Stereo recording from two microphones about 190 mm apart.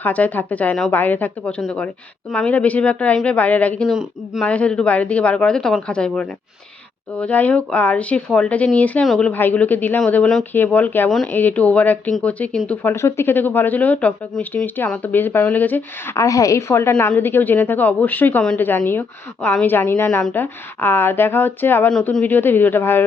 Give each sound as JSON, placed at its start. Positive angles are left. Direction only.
{"t": 0.0, "sound": "speech", "side_deg": 10}